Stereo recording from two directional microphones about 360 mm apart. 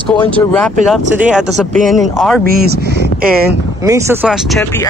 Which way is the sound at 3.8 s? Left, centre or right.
Centre.